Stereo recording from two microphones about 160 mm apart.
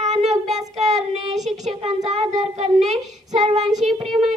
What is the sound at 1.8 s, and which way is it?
Speech, 40° right (ahead or behind).